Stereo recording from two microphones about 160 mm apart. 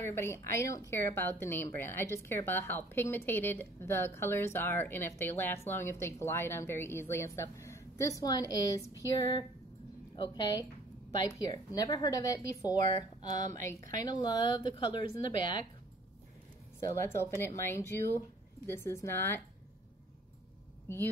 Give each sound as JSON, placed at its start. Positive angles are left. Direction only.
{"t": 0.0, "sound": "speech", "side_deg": 15}
{"t": 10.1, "sound": "a woman's voice", "side_deg": 25}
{"t": 16.8, "sound": "speech", "side_deg": 15}